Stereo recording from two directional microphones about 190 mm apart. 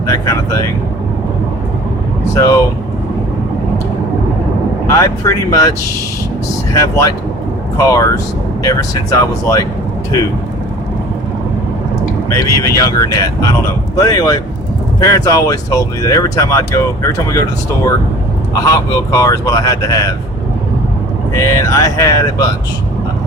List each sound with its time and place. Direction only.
0.1 s speech: 15° left (ahead or behind)
2.3 s speech: 15° left (ahead or behind)
4.9 s speech: 15° left (ahead or behind)
6.7 s speech: 15° left (ahead or behind)
12.4 s speech: 15° left (ahead or behind)
18.6 s speech: 20° left (ahead or behind)
21.3 s speech: 15° left (ahead or behind)